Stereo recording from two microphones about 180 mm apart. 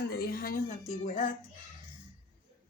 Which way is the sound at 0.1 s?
55° left (ahead or behind).